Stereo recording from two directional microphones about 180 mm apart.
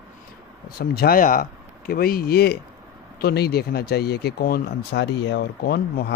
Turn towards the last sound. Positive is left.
turn(degrees=60)  # may be behind; listen again after turning